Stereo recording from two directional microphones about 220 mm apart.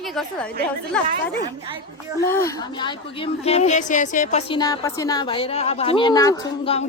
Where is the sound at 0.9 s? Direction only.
5° left (ahead or behind).